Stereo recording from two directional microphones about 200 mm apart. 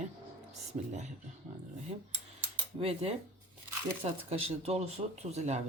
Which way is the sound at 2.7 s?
30° right (ahead or behind).